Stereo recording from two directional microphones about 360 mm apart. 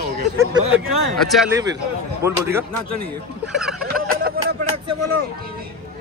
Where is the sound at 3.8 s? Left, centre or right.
Right.